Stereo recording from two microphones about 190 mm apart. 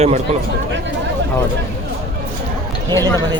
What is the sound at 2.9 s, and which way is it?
Speech, 15° left (ahead or behind).